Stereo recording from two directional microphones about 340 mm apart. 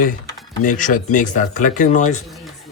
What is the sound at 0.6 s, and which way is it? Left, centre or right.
Speech, left.